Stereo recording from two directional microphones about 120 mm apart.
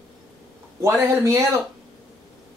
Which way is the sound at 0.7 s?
25° right (ahead or behind).